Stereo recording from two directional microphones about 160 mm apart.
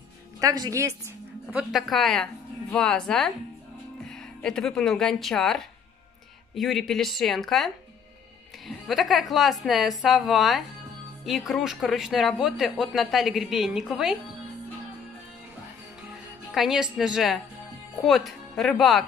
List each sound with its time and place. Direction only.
0.4 s a woman's voice: 20° right (ahead or behind)
1.5 s speech: 5° right (ahead or behind)
16.5 s speech: centre (ahead or behind)